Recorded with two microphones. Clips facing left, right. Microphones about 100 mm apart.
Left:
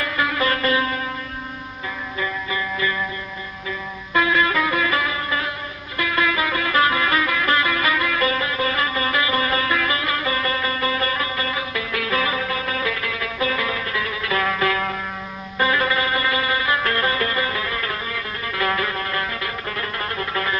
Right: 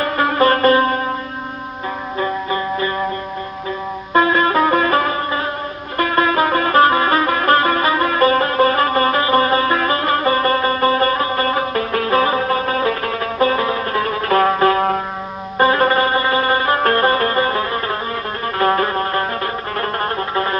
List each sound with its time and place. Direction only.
0.0 s music: 45° right (ahead or behind)
2.1 s music: 40° right (ahead or behind)
4.1 s music: 40° right (ahead or behind)